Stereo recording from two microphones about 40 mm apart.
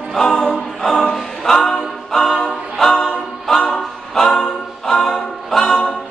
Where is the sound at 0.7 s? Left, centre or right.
Centre.